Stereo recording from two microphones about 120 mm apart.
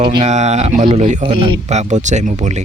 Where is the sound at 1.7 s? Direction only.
75° right (ahead or behind).